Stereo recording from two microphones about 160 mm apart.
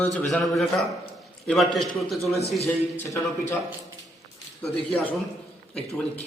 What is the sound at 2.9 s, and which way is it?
Speech, 20° left (ahead or behind).